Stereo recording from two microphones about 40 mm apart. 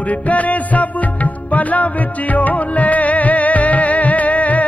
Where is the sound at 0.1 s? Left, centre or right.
Left.